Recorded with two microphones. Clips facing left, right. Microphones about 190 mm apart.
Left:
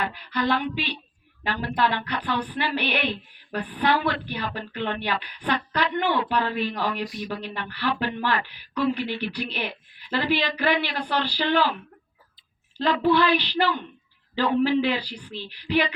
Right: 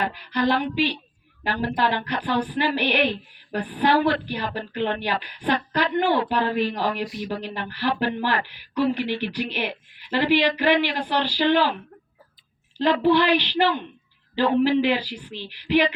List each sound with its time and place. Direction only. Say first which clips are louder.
0.0 s speech: right 3 dB; 45° right (ahead or behind)
9.3 s a woman's voice: right 3 dB; 15° right (ahead or behind)
12.8 s a woman's voice: right 2 dB; 15° right (ahead or behind)